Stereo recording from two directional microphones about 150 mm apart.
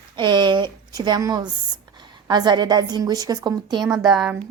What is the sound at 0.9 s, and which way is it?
A woman's voice, 25° right (ahead or behind).